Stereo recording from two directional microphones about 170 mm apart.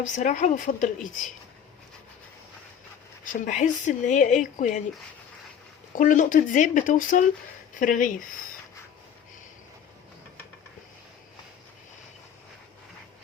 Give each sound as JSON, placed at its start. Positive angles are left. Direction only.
{"t": 0.0, "sound": "speech", "side_deg": 45}
{"t": 3.2, "sound": "speech", "side_deg": 45}
{"t": 5.9, "sound": "speech", "side_deg": 50}